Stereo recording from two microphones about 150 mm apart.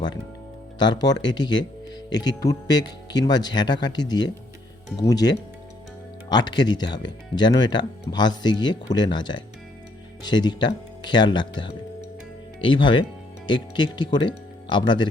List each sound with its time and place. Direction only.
0.8 s speech: 30° left (ahead or behind)